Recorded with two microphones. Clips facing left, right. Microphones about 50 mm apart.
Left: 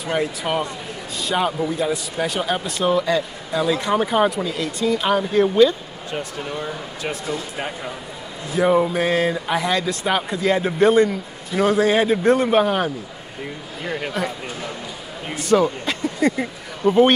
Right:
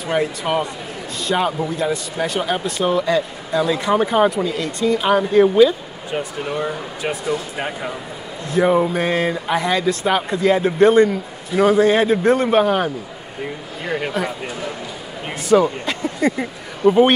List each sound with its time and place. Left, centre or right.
0.0 s a man's voice: centre
6.4 s speech: centre
8.5 s a man's voice: centre
13.8 s a man's voice: centre
15.4 s speech: centre